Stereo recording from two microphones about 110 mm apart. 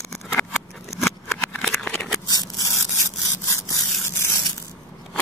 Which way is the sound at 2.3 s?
35° left (ahead or behind).